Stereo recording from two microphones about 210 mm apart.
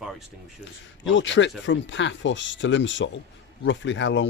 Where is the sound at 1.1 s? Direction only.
60° left (ahead or behind).